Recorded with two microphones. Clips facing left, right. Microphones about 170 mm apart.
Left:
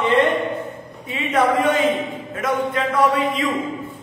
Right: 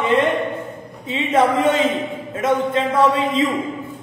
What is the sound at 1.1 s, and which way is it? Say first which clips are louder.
A man's voice: right 2 dB; 25° right (ahead or behind).